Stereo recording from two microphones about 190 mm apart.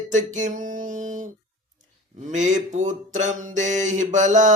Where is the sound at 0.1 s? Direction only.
40° right (ahead or behind).